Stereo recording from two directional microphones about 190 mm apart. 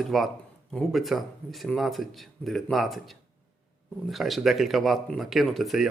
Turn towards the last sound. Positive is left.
turn(degrees=0)  # may be behind; listen again after turning